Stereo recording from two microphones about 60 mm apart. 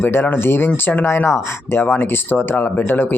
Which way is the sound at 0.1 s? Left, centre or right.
Left.